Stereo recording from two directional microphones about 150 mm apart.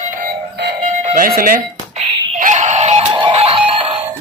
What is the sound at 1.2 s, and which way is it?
Speech, 65° right (ahead or behind).